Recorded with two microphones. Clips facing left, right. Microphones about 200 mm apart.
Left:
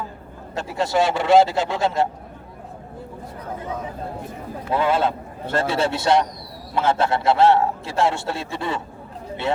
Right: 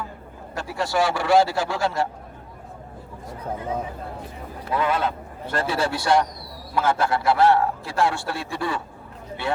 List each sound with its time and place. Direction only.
0.5 s a man's voice: 20° left (ahead or behind)
4.7 s a man's voice: 25° left (ahead or behind)